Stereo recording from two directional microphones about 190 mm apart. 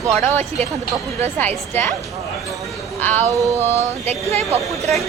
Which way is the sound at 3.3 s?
15° right (ahead or behind).